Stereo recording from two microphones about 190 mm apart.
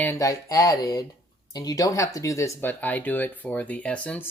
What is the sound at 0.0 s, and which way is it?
Speech, 15° left (ahead or behind).